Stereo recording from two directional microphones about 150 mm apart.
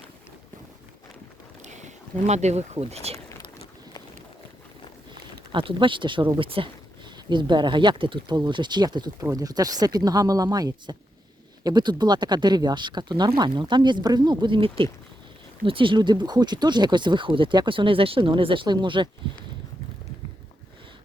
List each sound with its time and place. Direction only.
1.6 s speech: 50° right (ahead or behind)
5.5 s speech: 35° right (ahead or behind)